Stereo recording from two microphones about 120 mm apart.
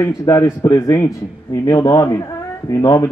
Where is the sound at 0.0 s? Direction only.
30° left (ahead or behind).